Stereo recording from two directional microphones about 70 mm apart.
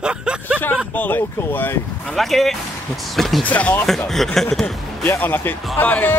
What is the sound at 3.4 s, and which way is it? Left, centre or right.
Speech, left.